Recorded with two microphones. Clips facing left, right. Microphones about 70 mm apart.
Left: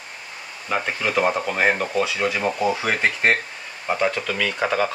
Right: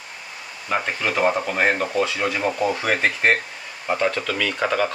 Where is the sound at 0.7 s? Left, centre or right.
Centre.